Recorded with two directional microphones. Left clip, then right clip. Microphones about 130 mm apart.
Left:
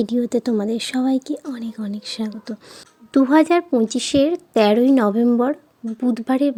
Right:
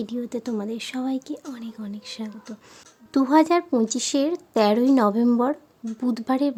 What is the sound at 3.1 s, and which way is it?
A woman's voice, 15° left (ahead or behind).